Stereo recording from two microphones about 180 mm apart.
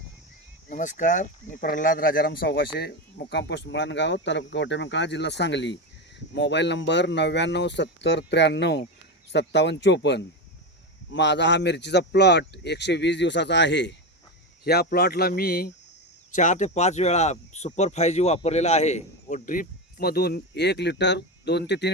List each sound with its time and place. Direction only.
0.7 s speech: 45° left (ahead or behind); by 13.9 s 75° left (ahead or behind)
14.6 s a man's voice: 60° left (ahead or behind)
16.3 s a man's voice: 45° left (ahead or behind); by 21.8 s 70° left (ahead or behind)